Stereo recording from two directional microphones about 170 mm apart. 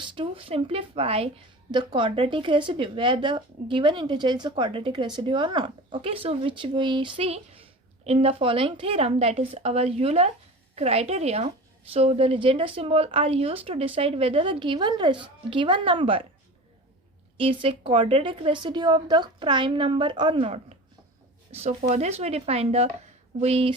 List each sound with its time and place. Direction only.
0.0 s speech: 30° right (ahead or behind)
17.3 s a woman's voice: 30° right (ahead or behind)